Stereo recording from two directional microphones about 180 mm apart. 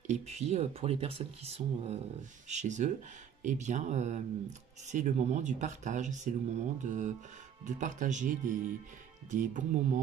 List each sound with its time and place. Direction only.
0.0 s speech: 40° right (ahead or behind)